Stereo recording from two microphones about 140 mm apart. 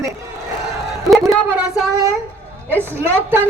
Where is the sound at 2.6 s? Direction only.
15° right (ahead or behind).